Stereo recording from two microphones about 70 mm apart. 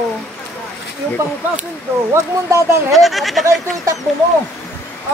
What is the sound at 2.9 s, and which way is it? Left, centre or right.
Speech, centre.